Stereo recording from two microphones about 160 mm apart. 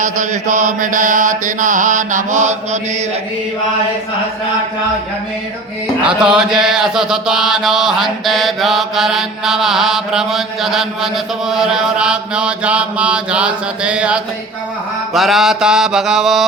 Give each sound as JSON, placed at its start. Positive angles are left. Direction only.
{"t": 0.0, "sound": "mantra", "side_deg": -50}
{"t": 6.0, "sound": "mantra", "side_deg": -5}